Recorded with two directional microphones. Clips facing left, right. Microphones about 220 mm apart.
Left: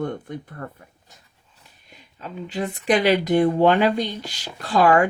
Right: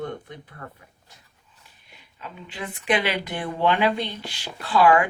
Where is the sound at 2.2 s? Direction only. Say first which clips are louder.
Left 8 dB; 40° left (ahead or behind).